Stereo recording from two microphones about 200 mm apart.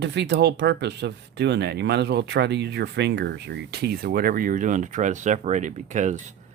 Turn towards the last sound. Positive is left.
turn(degrees=-35)  # may be behind; listen again after turning